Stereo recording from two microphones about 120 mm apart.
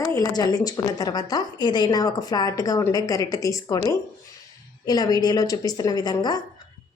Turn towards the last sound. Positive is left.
turn(degrees=35)  # may be behind; listen again after turning